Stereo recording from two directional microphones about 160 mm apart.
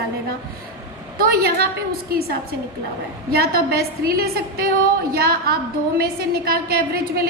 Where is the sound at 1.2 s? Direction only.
70° right (ahead or behind).